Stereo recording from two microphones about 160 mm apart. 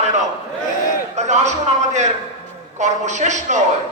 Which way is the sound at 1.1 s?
45° right (ahead or behind).